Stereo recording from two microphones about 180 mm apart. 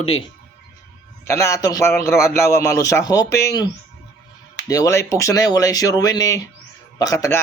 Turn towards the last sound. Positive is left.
turn(degrees=20)  # may be behind; listen again after turning